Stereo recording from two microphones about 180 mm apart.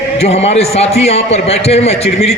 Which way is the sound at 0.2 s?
35° left (ahead or behind).